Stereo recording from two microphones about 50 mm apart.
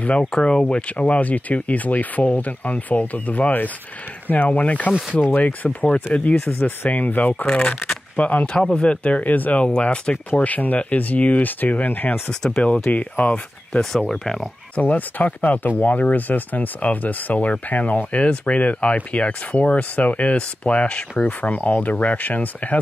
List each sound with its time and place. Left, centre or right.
0.2 s speech: centre; by 5.9 s left
6.1 s speech: left
9.7 s speech: centre; by 12.2 s left
12.3 s speech: centre
12.9 s speech: left
14.0 s speech: centre
14.8 s speech: left